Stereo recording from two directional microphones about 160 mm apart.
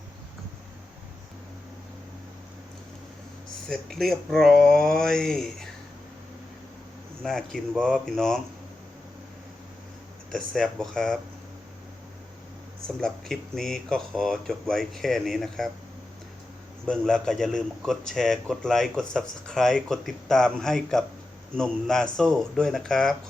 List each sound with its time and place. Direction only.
3.7 s speech: centre (ahead or behind)
7.2 s speech: 5° left (ahead or behind)
10.3 s speech: 5° left (ahead or behind)
13.0 s speech: centre (ahead or behind)
16.9 s speech: 5° left (ahead or behind)